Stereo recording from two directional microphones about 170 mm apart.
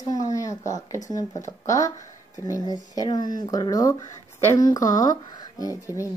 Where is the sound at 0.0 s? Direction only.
20° left (ahead or behind).